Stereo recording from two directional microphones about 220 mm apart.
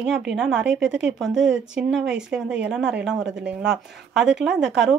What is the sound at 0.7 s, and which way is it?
Speech, 55° right (ahead or behind).